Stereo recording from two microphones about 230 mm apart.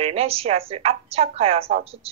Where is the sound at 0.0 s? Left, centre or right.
Right.